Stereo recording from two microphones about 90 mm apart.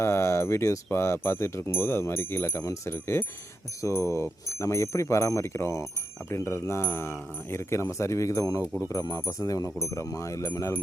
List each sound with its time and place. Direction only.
0.0 s speech: 30° left (ahead or behind)
0.9 s wind chime: 30° left (ahead or behind)
3.8 s speech: 35° left (ahead or behind)